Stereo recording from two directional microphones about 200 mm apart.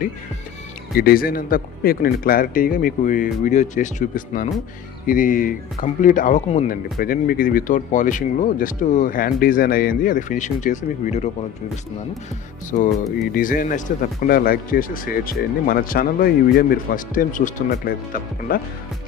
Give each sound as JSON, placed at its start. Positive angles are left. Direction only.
{"t": 0.9, "sound": "speech", "side_deg": 45}
{"t": 12.7, "sound": "speech", "side_deg": 40}